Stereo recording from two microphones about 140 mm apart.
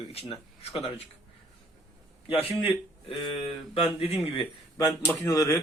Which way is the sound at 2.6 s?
40° left (ahead or behind).